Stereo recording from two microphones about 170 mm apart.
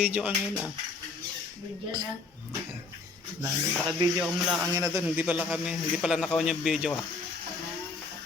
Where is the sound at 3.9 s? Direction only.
5° right (ahead or behind).